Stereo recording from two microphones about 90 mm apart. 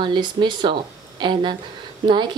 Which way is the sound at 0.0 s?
60° right (ahead or behind).